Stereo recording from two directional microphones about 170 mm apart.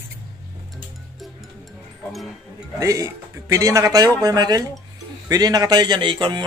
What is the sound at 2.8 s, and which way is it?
A man's voice, 20° right (ahead or behind).